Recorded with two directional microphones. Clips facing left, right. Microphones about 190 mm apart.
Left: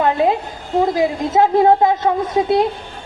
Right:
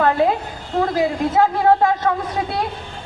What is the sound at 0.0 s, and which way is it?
A woman's voice, 20° left (ahead or behind).